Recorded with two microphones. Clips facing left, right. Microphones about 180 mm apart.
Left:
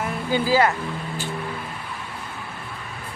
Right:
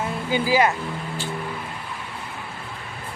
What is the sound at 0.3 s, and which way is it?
Speech, 15° right (ahead or behind).